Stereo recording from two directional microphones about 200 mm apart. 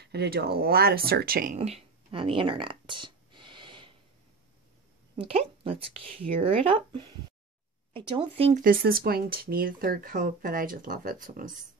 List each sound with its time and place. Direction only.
0.0 s speech: 55° right (ahead or behind); by 3.9 s 25° right (ahead or behind)
5.1 s speech: 30° right (ahead or behind)
8.6 s speech: 45° right (ahead or behind)